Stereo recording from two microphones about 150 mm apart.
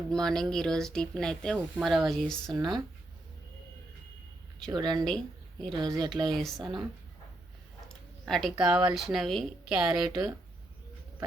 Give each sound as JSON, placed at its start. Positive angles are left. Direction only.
{"t": 0.1, "sound": "speech", "side_deg": 5}
{"t": 2.5, "sound": "speech", "side_deg": -30}
{"t": 4.7, "sound": "speech", "side_deg": -30}
{"t": 5.0, "sound": "a woman's voice", "side_deg": 0}
{"t": 5.8, "sound": "speech", "side_deg": -30}
{"t": 7.9, "sound": "speech", "side_deg": 0}